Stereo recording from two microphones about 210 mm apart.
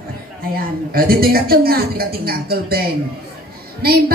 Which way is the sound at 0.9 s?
45° right (ahead or behind).